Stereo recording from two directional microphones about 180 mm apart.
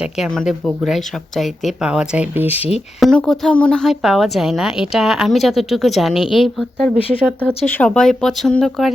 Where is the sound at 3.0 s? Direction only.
5° left (ahead or behind).